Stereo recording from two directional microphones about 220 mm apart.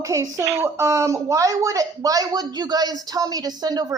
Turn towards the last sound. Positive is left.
turn(degrees=-20)  # may be behind; listen again after turning